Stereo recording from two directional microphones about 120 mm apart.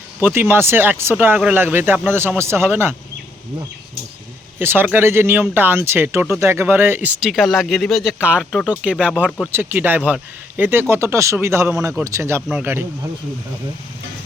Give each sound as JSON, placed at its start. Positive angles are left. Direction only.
{"t": 0.2, "sound": "speech", "side_deg": -15}
{"t": 4.6, "sound": "speech", "side_deg": -20}
{"t": 7.3, "sound": "speech", "side_deg": 0}
{"t": 8.2, "sound": "speech", "side_deg": -10}